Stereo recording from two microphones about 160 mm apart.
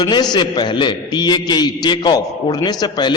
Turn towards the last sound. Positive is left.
turn(degrees=25)  # may be behind; listen again after turning